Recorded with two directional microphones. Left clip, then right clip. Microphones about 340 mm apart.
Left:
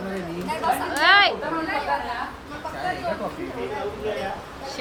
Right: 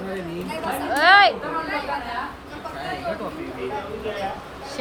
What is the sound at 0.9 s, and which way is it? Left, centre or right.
Speech, centre.